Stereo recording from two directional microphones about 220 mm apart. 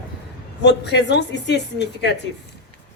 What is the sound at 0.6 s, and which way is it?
A woman's voice, 50° left (ahead or behind).